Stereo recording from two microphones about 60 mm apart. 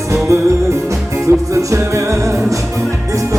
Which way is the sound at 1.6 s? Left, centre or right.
Right.